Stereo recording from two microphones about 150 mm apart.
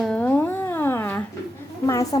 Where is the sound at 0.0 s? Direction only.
5° left (ahead or behind).